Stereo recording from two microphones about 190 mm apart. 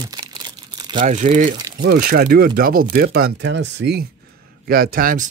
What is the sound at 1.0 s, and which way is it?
Speech, 40° right (ahead or behind).